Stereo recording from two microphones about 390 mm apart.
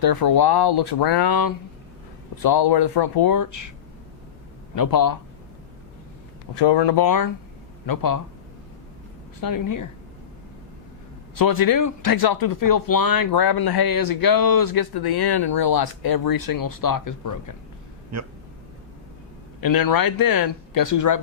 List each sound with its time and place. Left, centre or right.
0.0 s speech: left
2.4 s speech: left
4.7 s speech: left
6.5 s speech: left
9.4 s speech: left
11.3 s speech: left
19.6 s speech: left